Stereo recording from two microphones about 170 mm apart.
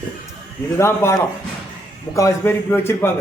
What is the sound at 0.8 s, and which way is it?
Speech, 15° left (ahead or behind).